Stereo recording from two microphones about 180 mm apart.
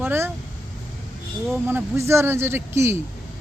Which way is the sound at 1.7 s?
15° right (ahead or behind).